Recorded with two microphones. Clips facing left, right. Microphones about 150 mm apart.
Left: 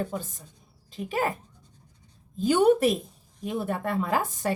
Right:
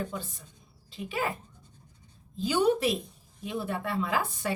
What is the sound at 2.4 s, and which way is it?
A woman's voice, 50° left (ahead or behind).